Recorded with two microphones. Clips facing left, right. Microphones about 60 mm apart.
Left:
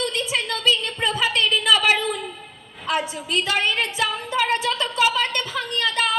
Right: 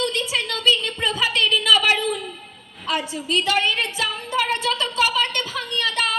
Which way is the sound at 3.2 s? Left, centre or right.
Left.